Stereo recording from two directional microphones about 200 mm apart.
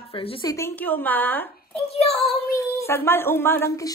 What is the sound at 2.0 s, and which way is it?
Child singing, 30° left (ahead or behind).